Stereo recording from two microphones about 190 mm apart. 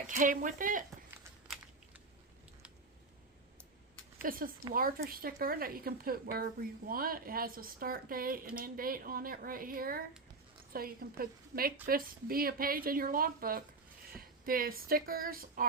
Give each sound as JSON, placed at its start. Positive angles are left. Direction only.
{"t": 0.1, "sound": "a woman's voice", "side_deg": -45}
{"t": 4.2, "sound": "a woman's voice", "side_deg": -50}